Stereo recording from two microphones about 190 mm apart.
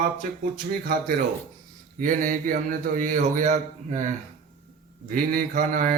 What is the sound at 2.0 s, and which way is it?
Mantra, 45° right (ahead or behind).